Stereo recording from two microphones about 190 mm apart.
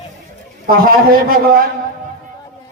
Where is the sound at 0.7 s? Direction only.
50° right (ahead or behind).